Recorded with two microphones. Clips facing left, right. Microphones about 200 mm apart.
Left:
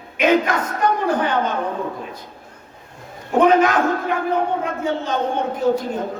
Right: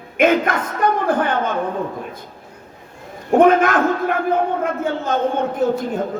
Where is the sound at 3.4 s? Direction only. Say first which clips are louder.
Right 1 dB; 50° right (ahead or behind).